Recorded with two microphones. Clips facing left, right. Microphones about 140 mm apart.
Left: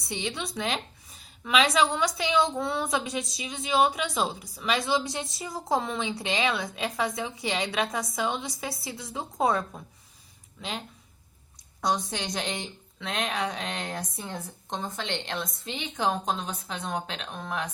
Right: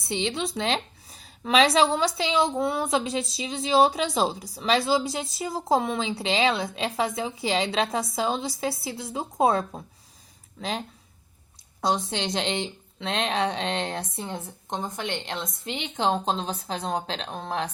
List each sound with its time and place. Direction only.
0.1 s a woman's voice: 25° right (ahead or behind)
11.8 s a woman's voice: 25° right (ahead or behind)